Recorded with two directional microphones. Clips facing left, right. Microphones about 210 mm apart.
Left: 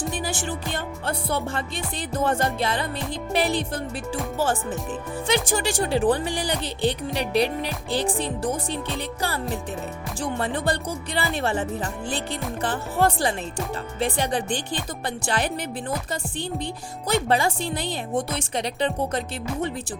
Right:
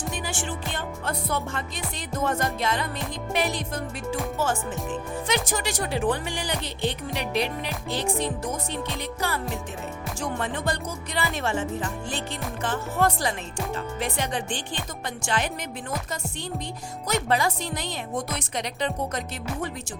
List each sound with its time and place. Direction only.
0.3 s music: 40° left (ahead or behind)
5.3 s music: 30° left (ahead or behind)
12.6 s music: 30° left (ahead or behind)
17.1 s speech: 30° left (ahead or behind)